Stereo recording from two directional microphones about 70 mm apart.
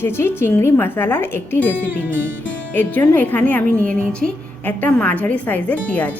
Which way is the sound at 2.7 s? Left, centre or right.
Left.